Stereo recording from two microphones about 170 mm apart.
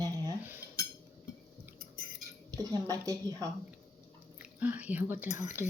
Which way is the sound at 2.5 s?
20° right (ahead or behind).